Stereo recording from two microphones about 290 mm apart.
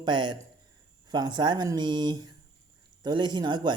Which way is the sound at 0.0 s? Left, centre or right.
Centre.